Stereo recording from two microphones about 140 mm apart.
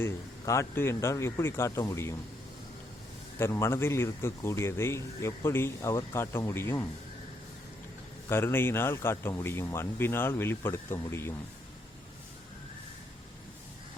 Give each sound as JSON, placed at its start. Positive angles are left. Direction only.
{"t": 0.0, "sound": "speech", "side_deg": 20}
{"t": 3.3, "sound": "speech", "side_deg": 20}
{"t": 8.3, "sound": "speech", "side_deg": 15}